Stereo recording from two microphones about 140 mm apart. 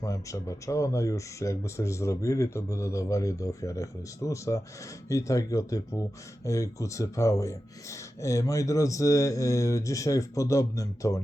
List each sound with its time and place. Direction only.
0.0 s speech: 25° left (ahead or behind)